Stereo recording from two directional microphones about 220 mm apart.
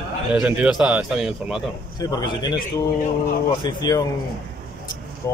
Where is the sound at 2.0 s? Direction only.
20° left (ahead or behind).